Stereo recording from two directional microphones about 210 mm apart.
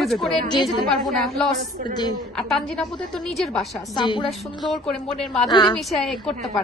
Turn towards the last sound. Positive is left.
turn(degrees=0)  # may be behind; listen again after turning